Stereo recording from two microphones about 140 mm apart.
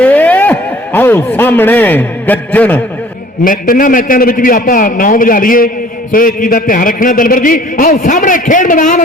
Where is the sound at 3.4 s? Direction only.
85° left.